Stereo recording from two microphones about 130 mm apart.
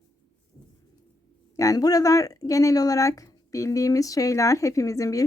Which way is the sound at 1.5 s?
25° left (ahead or behind).